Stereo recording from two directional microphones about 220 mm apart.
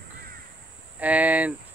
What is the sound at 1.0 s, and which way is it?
Speech, 5° right (ahead or behind).